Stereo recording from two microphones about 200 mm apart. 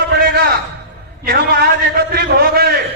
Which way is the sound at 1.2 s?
55° right (ahead or behind).